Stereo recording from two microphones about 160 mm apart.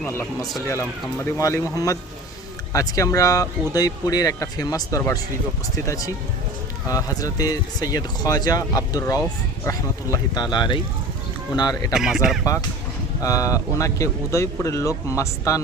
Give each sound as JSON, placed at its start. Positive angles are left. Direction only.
{"t": 0.0, "sound": "speech", "side_deg": 15}
{"t": 2.7, "sound": "speech", "side_deg": 20}
{"t": 11.9, "sound": "speech", "side_deg": -5}
{"t": 13.2, "sound": "speech", "side_deg": 20}